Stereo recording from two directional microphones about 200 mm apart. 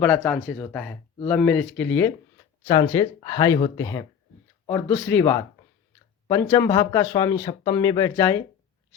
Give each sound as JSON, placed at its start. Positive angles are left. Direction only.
{"t": 0.0, "sound": "speech", "side_deg": 5}
{"t": 0.3, "sound": "speech", "side_deg": -5}